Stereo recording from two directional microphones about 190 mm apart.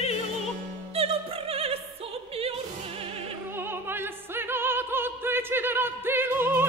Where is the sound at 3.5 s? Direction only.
10° right (ahead or behind).